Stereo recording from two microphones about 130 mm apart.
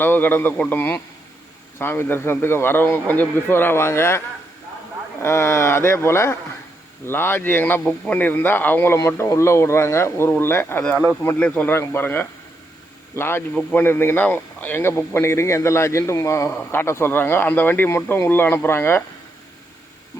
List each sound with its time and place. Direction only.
0.0 s speech: 15° left (ahead or behind)
5.2 s speech: 20° left (ahead or behind)
10.8 s speech: 5° left (ahead or behind)
13.6 s speech: 5° left (ahead or behind)
13.8 s speech: 20° left (ahead or behind)